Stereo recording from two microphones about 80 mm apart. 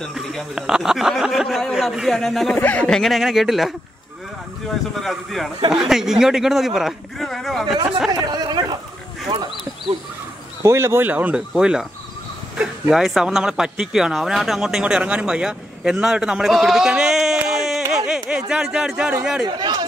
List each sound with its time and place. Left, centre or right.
0.1 s a sound: centre
0.6 s speech: centre
2.5 s speech: centre
2.9 s speech: centre
8.1 s chatter: right
10.6 s speech: right
11.5 s speech: centre
12.9 s speech: centre
19.4 s speech: right